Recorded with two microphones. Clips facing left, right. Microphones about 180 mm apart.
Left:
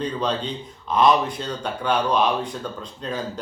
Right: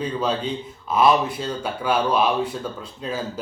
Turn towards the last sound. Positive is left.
turn(degrees=-5)  # may be behind; listen again after turning